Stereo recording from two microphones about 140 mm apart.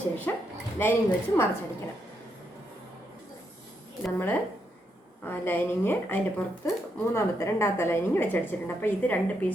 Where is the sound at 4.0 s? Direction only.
15° left (ahead or behind).